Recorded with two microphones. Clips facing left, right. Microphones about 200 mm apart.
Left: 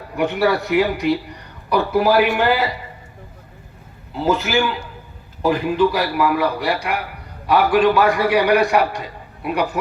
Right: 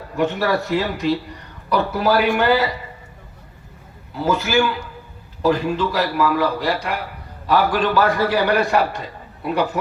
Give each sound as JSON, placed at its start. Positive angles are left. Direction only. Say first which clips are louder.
{"t": 0.2, "sound": "a man's voice", "louder": "left 1 dB", "side_deg": 15}
{"t": 4.1, "sound": "a man's voice", "louder": "even", "side_deg": 20}